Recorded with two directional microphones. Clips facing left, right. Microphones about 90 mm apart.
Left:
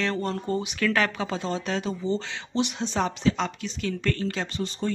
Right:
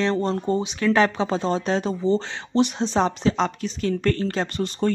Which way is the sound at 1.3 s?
35° right (ahead or behind).